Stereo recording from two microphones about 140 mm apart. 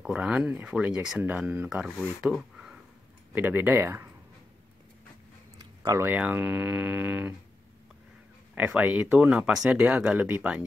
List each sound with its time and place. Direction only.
0.0 s speech: 5° right (ahead or behind)
2.0 s speech: centre (ahead or behind)
3.3 s speech: 15° right (ahead or behind)
5.9 s speech: 15° right (ahead or behind)
8.5 s speech: 10° right (ahead or behind)